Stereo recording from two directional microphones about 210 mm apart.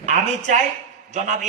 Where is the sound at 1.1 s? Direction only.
35° right (ahead or behind).